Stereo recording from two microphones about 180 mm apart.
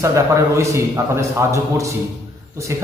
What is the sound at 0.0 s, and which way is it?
A man's voice, 15° right (ahead or behind).